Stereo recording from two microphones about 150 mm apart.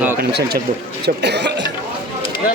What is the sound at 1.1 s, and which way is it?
Speech, 75° right (ahead or behind).